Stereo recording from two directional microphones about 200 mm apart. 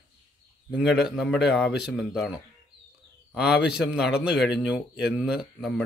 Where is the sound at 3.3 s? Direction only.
5° right (ahead or behind).